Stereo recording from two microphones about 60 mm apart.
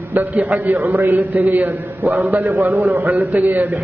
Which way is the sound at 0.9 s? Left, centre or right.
Right.